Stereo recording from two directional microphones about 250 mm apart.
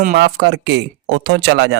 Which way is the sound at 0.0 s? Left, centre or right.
Right.